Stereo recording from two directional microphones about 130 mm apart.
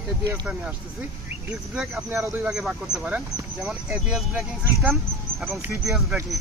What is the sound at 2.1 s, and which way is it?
Speech, 20° right (ahead or behind).